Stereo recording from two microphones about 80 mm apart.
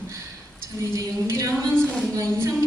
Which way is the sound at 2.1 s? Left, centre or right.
Right.